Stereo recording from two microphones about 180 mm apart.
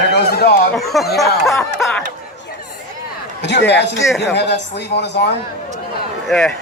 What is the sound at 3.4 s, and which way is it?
A man's voice, 70° left (ahead or behind).